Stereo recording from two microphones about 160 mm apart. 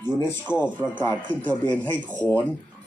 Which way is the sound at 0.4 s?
10° right (ahead or behind).